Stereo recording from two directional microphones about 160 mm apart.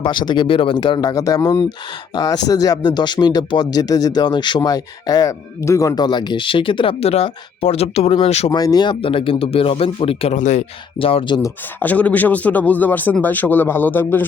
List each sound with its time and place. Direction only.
0.0 s speech: 30° left (ahead or behind)
8.5 s speech: 25° left (ahead or behind); by 10.7 s 50° left (ahead or behind)
10.9 s speech: 35° left (ahead or behind)
11.4 s speech: 10° left (ahead or behind)